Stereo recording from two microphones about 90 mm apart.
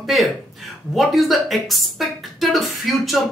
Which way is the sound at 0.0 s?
Centre (ahead or behind).